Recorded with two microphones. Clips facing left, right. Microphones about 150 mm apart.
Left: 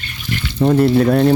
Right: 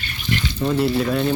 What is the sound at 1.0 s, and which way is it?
Speech, 65° left (ahead or behind).